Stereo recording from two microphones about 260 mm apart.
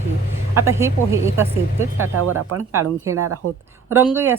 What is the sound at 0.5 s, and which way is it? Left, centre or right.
A woman's voice, centre.